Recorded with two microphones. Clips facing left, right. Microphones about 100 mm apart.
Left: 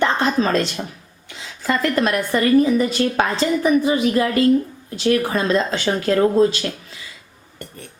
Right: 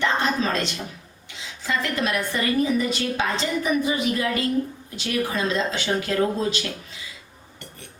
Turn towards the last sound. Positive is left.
turn(degrees=45)  # may be behind; listen again after turning